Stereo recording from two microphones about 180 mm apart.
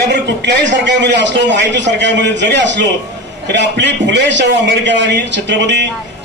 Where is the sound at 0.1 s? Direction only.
75° right (ahead or behind).